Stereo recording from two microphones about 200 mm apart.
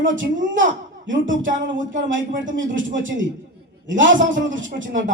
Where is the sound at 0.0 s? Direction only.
70° right (ahead or behind).